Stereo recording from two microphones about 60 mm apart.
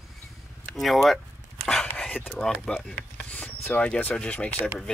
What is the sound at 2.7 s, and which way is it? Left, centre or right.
Speech, centre.